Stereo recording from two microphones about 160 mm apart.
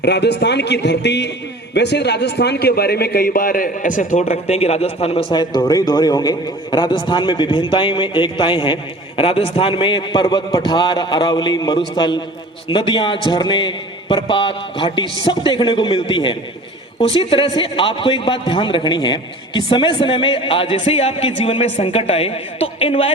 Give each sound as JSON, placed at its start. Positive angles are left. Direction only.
{"t": 0.0, "sound": "a man's voice", "side_deg": 90}